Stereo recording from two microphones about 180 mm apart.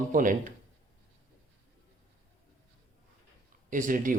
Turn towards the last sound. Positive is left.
turn(degrees=-45)  # may be behind; listen again after turning